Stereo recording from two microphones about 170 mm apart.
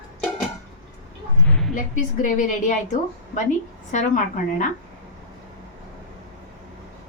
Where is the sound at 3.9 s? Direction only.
45° left (ahead or behind).